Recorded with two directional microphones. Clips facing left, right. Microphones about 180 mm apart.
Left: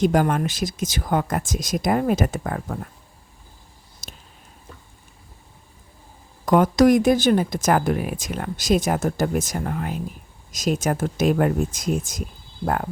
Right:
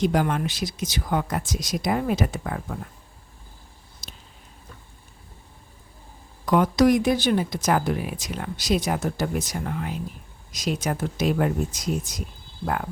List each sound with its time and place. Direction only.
0.0 s speech: 45° left (ahead or behind)
4.0 s a sound: 45° left (ahead or behind)
6.4 s speech: 45° left (ahead or behind)